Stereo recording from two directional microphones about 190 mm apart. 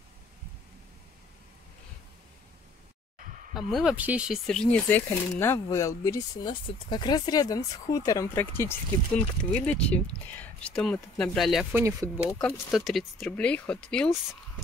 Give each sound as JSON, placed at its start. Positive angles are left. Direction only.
{"t": 3.5, "sound": "speech", "side_deg": 0}
{"t": 4.6, "sound": "speech", "side_deg": 10}
{"t": 11.7, "sound": "speech", "side_deg": -15}
{"t": 12.4, "sound": "speech", "side_deg": 0}